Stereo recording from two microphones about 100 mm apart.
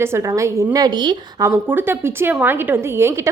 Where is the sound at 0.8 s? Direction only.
45° right (ahead or behind).